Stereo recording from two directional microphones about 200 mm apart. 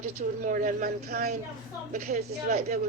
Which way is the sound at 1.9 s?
40° right (ahead or behind).